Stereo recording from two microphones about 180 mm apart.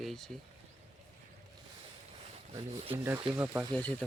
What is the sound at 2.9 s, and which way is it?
Speech, 15° right (ahead or behind).